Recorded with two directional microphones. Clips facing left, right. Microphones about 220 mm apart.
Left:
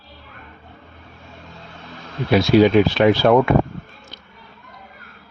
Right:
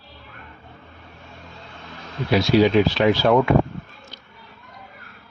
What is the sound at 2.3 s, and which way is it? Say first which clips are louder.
Speech: left 3 dB; 55° left (ahead or behind).